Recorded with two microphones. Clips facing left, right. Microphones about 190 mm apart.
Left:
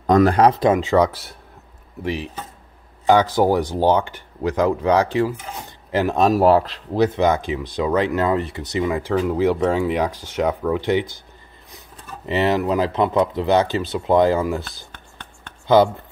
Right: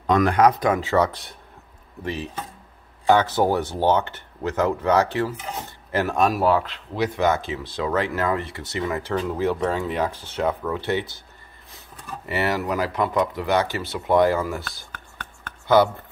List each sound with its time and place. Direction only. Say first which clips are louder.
0.0 s speech: left 3 dB; 40° left (ahead or behind)
6.4 s speech: left 5 dB; 35° left (ahead or behind)
7.1 s speech: left 3 dB; 20° left (ahead or behind)
12.3 s speech: left 5 dB; 20° left (ahead or behind)
15.4 s a sound: left 3 dB; 20° left (ahead or behind)